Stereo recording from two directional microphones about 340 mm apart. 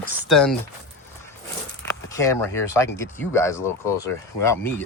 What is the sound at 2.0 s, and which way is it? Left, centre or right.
Speech, centre.